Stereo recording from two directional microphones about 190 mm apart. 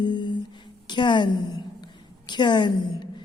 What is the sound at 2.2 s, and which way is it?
Speech, 25° left (ahead or behind).